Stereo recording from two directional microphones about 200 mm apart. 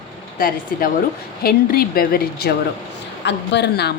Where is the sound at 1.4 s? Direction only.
50° left (ahead or behind).